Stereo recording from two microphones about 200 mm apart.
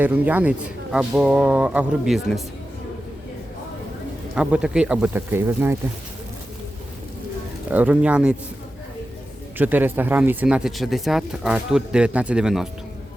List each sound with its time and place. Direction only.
0.0 s speech: 10° right (ahead or behind)
4.4 s speech: 5° right (ahead or behind)
7.7 s speech: 10° right (ahead or behind)
9.6 s speech: 10° right (ahead or behind)